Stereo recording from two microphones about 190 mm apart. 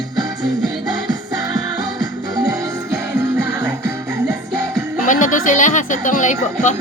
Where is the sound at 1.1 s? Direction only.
20° right (ahead or behind).